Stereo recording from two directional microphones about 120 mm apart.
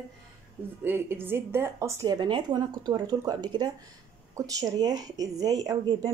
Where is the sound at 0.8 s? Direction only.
20° right (ahead or behind).